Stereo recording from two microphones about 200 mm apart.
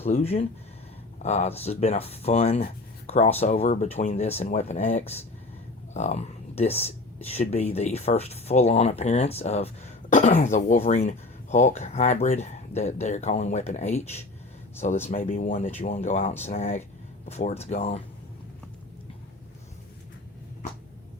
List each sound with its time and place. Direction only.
0.2 s speech: 30° left (ahead or behind)